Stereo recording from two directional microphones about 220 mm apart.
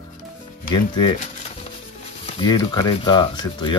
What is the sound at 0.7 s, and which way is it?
Speech, 20° left (ahead or behind).